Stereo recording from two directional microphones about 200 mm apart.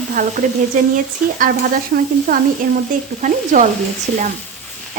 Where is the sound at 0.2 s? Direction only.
40° right (ahead or behind).